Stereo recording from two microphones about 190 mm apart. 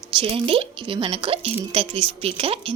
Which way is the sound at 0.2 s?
30° right (ahead or behind).